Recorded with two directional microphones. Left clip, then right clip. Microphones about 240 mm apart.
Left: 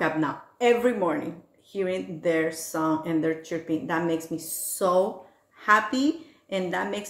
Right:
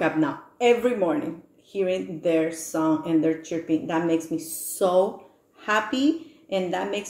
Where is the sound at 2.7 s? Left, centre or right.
Left.